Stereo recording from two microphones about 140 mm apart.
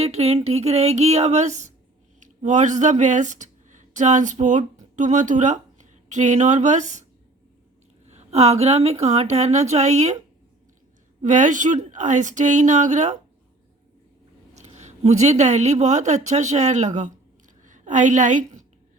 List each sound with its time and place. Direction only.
0.0 s speech: 50° right (ahead or behind)
8.0 s speech: 55° right (ahead or behind)
11.2 s speech: 60° right (ahead or behind)
14.5 s a woman's voice: 55° right (ahead or behind)